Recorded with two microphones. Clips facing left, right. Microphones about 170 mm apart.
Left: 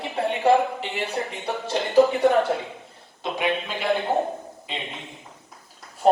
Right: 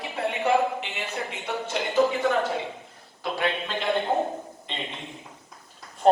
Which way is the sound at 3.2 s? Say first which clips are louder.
Left 2 dB; 10° left (ahead or behind).